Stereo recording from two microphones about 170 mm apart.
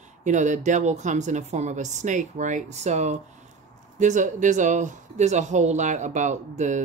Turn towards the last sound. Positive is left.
turn(degrees=-45)  # may be behind; listen again after turning